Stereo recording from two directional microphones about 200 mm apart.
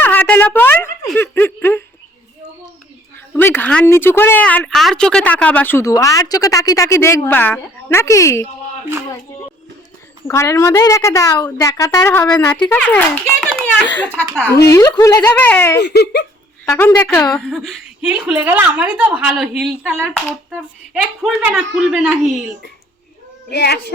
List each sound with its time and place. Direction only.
0.0 s speech: 10° left (ahead or behind)
3.3 s speech: 10° left (ahead or behind)
10.2 s speech: 15° left (ahead or behind)
15.8 s speech: 55° left (ahead or behind)
16.6 s a woman's voice: 15° left (ahead or behind); by 22.3 s 5° right (ahead or behind)
23.5 s speech: 55° left (ahead or behind)